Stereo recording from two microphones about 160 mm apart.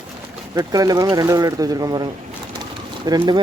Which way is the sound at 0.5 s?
20° right (ahead or behind).